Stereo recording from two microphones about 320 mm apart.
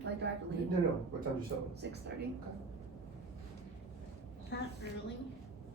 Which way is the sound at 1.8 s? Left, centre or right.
Right.